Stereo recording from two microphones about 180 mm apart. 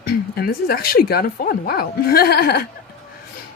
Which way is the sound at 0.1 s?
60° left (ahead or behind).